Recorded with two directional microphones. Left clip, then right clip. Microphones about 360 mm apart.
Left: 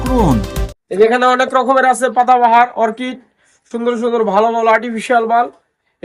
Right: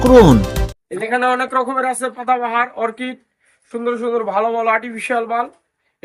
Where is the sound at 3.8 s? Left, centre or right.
Left.